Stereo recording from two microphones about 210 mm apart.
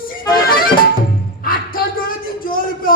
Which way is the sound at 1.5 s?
45° left (ahead or behind).